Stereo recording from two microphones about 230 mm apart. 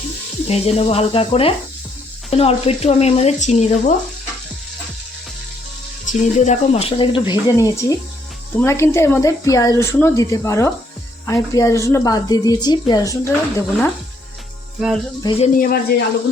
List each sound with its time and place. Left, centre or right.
0.4 s speech: left
6.1 s a woman's voice: left; by 13.9 s centre
14.8 s music: centre
15.2 s speech: left
15.5 s speech: left